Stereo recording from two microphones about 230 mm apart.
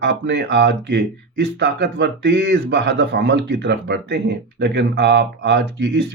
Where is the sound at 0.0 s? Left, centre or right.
Right.